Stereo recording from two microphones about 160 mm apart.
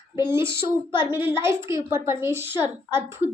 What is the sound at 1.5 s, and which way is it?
A child's voice, 15° right (ahead or behind).